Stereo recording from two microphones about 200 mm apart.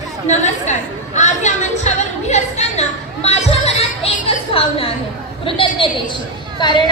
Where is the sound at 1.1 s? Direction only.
35° left (ahead or behind).